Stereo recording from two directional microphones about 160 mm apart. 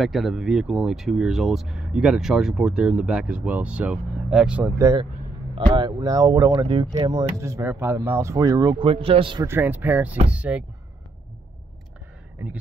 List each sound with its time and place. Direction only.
0.0 s speech: centre (ahead or behind); by 5.0 s 20° right (ahead or behind)
5.5 s speech: 30° right (ahead or behind)
9.5 s speech: 10° right (ahead or behind)